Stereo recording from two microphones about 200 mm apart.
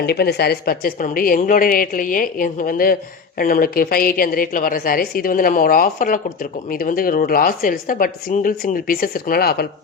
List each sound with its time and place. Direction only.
0.0 s a woman's voice: 55° left (ahead or behind)